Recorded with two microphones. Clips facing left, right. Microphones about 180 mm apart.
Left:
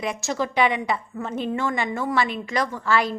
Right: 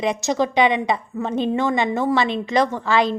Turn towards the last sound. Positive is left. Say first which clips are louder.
# right 4 dB
turn(degrees=-20)  # may be behind; listen again after turning